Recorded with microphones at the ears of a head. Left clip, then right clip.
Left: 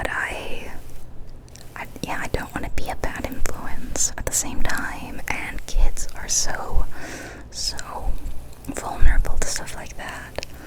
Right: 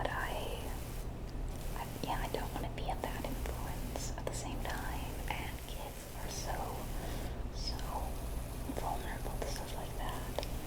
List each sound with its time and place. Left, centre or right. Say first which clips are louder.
0.0 s whispering: left 12 dB; left
1.7 s whispering: left 10 dB; left